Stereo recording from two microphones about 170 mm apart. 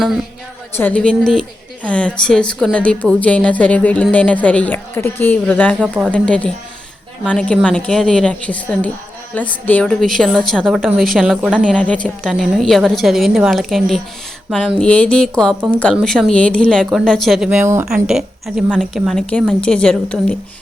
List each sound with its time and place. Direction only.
0.8 s a woman's voice: 10° left (ahead or behind)
14.8 s a woman's voice: 10° left (ahead or behind)
17.6 s speech: 15° right (ahead or behind)
17.8 s a woman's voice: 5° right (ahead or behind)